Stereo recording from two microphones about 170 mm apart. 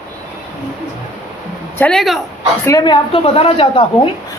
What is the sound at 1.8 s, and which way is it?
Speech, 5° left (ahead or behind).